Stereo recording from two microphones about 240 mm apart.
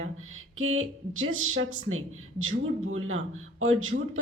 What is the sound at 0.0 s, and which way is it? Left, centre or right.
A woman's voice, right.